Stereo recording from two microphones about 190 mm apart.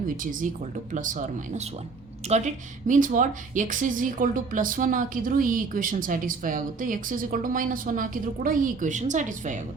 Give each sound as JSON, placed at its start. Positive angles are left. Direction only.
{"t": 0.2, "sound": "speech", "side_deg": -45}